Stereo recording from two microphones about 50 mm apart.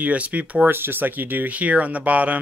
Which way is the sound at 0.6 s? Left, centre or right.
Right.